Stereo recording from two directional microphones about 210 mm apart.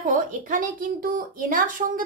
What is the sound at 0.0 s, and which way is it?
A woman's voice, 40° right (ahead or behind).